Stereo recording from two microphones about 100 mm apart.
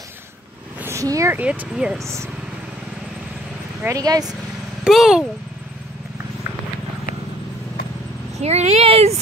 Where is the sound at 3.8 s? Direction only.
35° right (ahead or behind).